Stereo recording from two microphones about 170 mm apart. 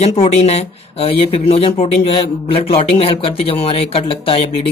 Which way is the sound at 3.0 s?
35° left (ahead or behind).